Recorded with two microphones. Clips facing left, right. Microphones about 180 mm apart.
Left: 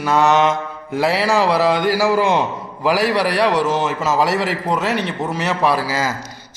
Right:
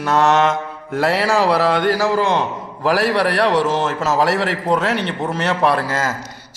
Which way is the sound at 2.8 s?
Centre (ahead or behind).